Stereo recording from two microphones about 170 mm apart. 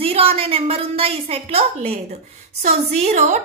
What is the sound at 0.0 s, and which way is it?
A woman's voice, 35° right (ahead or behind).